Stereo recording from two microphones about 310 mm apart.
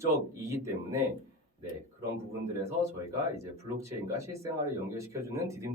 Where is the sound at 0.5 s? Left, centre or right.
Centre.